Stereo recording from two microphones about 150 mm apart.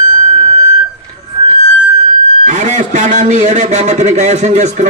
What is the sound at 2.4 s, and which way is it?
A man's voice, 55° right (ahead or behind).